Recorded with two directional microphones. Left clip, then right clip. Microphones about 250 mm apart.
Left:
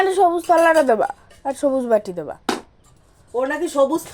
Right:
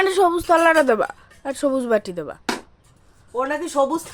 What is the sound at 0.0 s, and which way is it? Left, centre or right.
A woman's voice, centre.